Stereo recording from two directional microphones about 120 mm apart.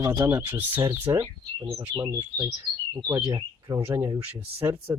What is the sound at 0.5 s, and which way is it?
Speech, 20° right (ahead or behind).